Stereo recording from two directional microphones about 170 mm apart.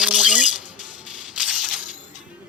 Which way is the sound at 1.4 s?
5° right (ahead or behind).